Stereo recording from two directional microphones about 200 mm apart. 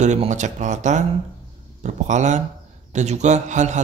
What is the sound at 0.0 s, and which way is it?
A man's voice, 35° right (ahead or behind).